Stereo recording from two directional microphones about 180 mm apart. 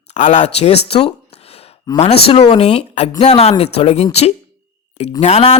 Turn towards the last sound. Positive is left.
turn(degrees=35)  # may be behind; listen again after turning